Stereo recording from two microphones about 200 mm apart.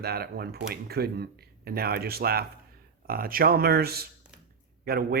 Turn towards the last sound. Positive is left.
turn(degrees=-50)  # may be behind; listen again after turning